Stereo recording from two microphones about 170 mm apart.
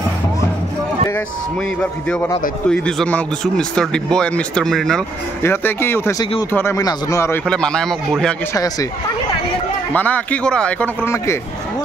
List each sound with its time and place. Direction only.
1.8 s speech: 5° left (ahead or behind)
5.4 s speech: 10° left (ahead or behind)
7.4 s speech: 5° left (ahead or behind)
8.5 s speech: 20° left (ahead or behind)
9.9 s speech: 10° left (ahead or behind)